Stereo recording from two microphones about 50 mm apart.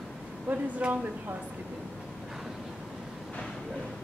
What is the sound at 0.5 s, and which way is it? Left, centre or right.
Speech, right.